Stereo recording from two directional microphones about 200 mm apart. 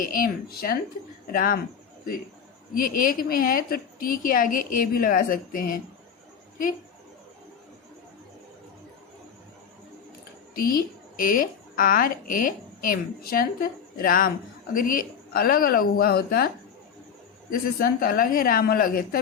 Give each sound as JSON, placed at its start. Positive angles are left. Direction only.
{"t": 0.0, "sound": "a woman's voice", "side_deg": 45}
{"t": 2.7, "sound": "a woman's voice", "side_deg": 45}
{"t": 10.7, "sound": "a woman's voice", "side_deg": 45}
{"t": 17.5, "sound": "a woman's voice", "side_deg": 45}